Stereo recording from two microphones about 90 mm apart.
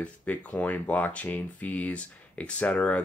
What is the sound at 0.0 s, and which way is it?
Speech, 15° left (ahead or behind).